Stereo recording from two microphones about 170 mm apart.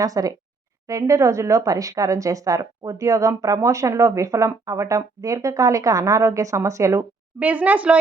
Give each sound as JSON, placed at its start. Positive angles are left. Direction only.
{"t": 0.0, "sound": "a woman's voice", "side_deg": -20}